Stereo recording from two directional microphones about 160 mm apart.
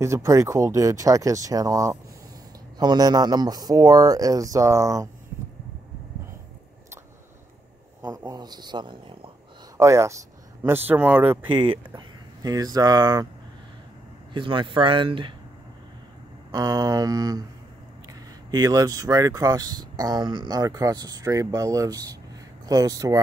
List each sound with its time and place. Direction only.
0.0 s speech: 20° right (ahead or behind)
8.3 s speech: 25° right (ahead or behind)
9.8 s speech: 20° right (ahead or behind)
11.7 s speech: 25° right (ahead or behind)
14.3 s speech: 30° right (ahead or behind)
16.5 s speech: 25° right (ahead or behind)